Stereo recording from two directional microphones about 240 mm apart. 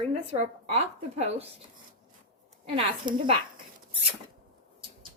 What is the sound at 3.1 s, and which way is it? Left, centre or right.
Speech, centre.